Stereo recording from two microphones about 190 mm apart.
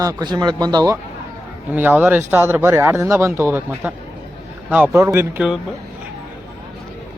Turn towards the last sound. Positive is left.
turn(degrees=-10)  # may be behind; listen again after turning